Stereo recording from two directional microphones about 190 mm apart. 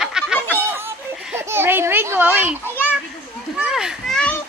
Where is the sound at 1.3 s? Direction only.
10° right (ahead or behind).